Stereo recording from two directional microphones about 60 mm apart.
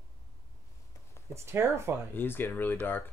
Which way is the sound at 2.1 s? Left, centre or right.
Left.